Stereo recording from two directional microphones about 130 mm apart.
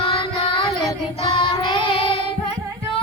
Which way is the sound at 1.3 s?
40° left (ahead or behind).